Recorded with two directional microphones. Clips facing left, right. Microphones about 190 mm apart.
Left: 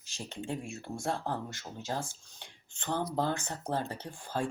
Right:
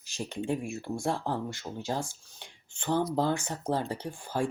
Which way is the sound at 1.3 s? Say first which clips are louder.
Right 4 dB; 10° right (ahead or behind).